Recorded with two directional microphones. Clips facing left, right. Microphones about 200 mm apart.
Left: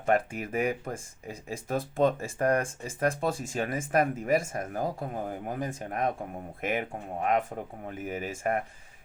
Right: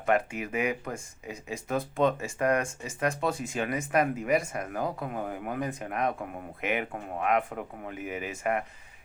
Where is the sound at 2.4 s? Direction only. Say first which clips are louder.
Even; 30° left (ahead or behind).